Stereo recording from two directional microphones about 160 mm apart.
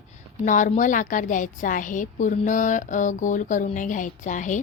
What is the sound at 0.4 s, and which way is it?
A woman's voice, 55° left (ahead or behind).